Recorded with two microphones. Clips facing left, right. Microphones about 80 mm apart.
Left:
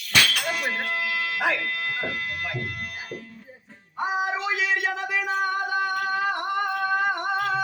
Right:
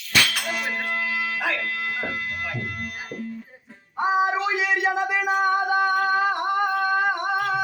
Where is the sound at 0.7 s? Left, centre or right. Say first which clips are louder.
Right 1 dB; centre.